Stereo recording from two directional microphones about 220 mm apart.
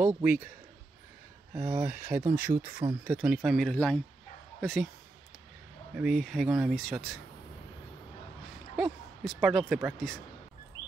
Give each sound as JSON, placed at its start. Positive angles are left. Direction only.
{"t": 0.1, "sound": "speech", "side_deg": -5}
{"t": 1.5, "sound": "speech", "side_deg": -30}
{"t": 2.3, "sound": "speech", "side_deg": -10}
{"t": 5.9, "sound": "speech", "side_deg": 0}
{"t": 8.7, "sound": "speech", "side_deg": 0}